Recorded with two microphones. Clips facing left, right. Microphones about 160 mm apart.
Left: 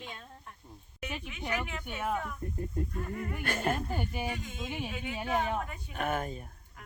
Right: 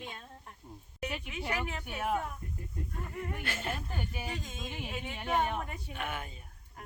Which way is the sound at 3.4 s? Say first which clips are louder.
Left 6 dB; 50° left (ahead or behind).